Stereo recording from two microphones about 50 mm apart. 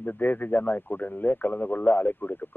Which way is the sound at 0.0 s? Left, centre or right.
Left.